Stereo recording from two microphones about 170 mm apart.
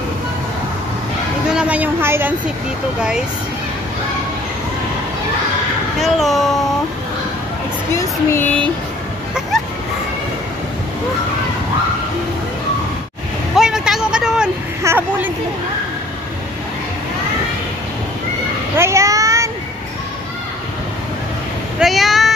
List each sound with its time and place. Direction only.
1.5 s a sound: 5° right (ahead or behind)
3.0 s speech: 5° right (ahead or behind)
5.9 s speech: centre (ahead or behind)
7.9 s speech: 15° left (ahead or behind)
13.6 s vehicle: 5° right (ahead or behind)
14.8 s a woman's voice: 15° right (ahead or behind)
18.8 s a sound: 15° right (ahead or behind)
21.7 s speech: centre (ahead or behind)